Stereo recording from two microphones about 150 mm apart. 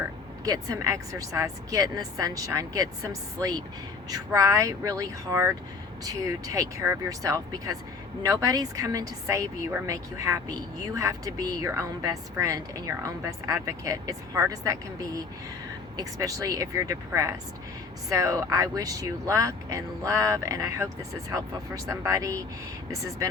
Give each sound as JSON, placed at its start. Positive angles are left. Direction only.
{"t": 0.4, "sound": "a woman's voice", "side_deg": -25}